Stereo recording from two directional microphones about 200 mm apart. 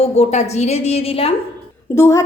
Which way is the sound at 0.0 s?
35° left (ahead or behind).